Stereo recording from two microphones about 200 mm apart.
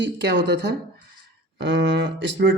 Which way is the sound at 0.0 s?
55° right (ahead or behind).